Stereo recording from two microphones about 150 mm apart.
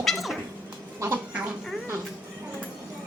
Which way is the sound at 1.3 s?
10° right (ahead or behind).